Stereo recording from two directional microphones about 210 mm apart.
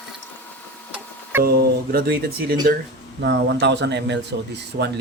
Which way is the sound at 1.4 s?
45° right (ahead or behind).